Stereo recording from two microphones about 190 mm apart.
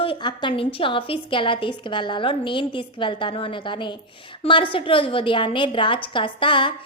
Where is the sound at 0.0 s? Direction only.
25° left (ahead or behind).